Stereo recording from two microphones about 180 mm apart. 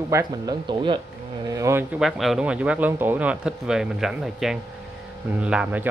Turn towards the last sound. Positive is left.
turn(degrees=-5)  # may be behind; listen again after turning